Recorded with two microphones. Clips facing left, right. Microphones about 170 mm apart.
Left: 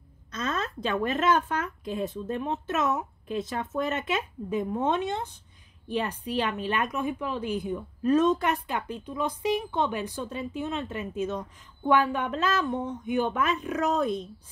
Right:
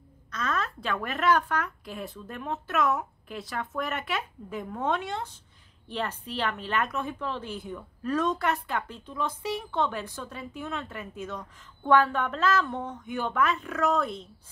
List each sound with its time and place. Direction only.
0.3 s a woman's voice: 20° left (ahead or behind)